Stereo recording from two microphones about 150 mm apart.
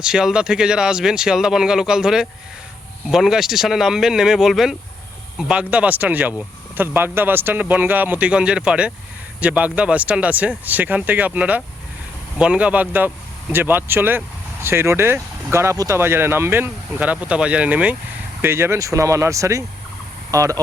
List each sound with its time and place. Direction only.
0.0 s speech: 5° right (ahead or behind); by 20.6 s 20° right (ahead or behind)